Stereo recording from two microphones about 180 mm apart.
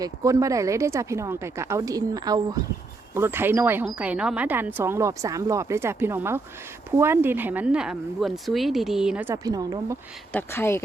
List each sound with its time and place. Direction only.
0.0 s speech: 20° right (ahead or behind)
10.3 s speech: 15° left (ahead or behind)